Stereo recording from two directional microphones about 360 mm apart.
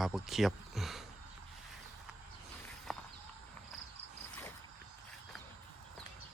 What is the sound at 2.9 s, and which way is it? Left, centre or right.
Walk, centre.